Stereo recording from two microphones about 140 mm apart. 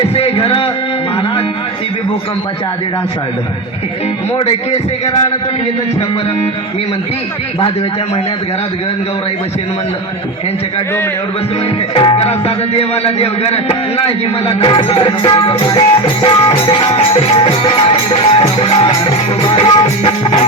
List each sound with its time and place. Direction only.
0.0 s speech: 45° left (ahead or behind)
11.9 s speech: 40° left (ahead or behind)
15.4 s music: 40° left (ahead or behind)